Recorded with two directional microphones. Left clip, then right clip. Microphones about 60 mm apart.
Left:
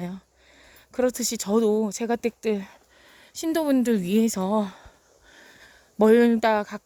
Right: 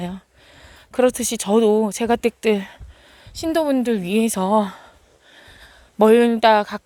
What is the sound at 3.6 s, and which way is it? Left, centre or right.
Speech, left.